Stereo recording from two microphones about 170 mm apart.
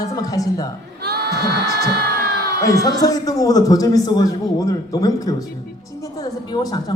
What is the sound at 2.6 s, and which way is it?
A man's voice, 20° left (ahead or behind).